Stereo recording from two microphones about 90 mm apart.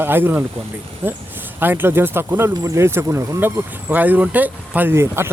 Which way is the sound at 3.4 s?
20° right (ahead or behind).